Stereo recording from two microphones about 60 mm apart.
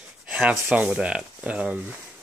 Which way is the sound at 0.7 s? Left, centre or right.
Centre.